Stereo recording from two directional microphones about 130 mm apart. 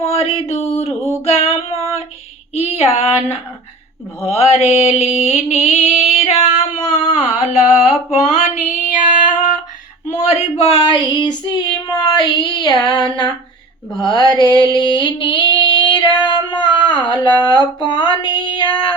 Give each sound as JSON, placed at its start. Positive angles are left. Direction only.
{"t": 0.0, "sound": "a sound", "side_deg": 50}
{"t": 1.2, "sound": "child singing", "side_deg": 50}
{"t": 2.6, "sound": "female singing", "side_deg": 50}
{"t": 4.3, "sound": "mantra", "side_deg": 50}
{"t": 4.7, "sound": "music", "side_deg": 50}
{"t": 8.1, "sound": "female singing", "side_deg": 65}
{"t": 10.1, "sound": "female singing", "side_deg": 60}
{"t": 11.9, "sound": "child singing", "side_deg": 30}
{"t": 14.0, "sound": "a sound", "side_deg": 35}
{"t": 14.8, "sound": "female singing", "side_deg": 35}
{"t": 17.7, "sound": "a sound", "side_deg": 35}